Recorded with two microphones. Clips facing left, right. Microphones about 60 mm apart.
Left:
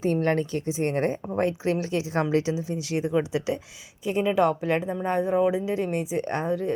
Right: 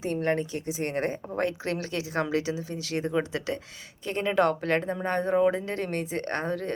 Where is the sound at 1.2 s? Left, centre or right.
Centre.